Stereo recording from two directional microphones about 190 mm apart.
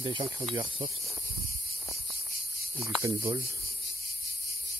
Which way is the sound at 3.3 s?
30° right (ahead or behind).